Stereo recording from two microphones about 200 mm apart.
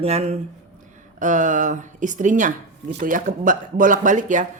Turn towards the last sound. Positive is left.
turn(degrees=-40)  # may be behind; listen again after turning